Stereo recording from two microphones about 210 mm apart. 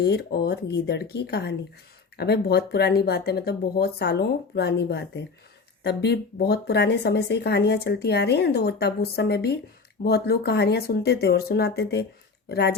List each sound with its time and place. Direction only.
0.0 s speech: 50° left (ahead or behind)